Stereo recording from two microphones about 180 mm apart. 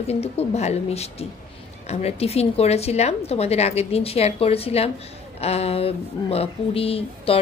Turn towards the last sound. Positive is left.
turn(degrees=30)  # may be behind; listen again after turning